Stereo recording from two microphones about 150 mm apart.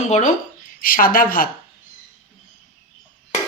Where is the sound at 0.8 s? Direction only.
70° left (ahead or behind).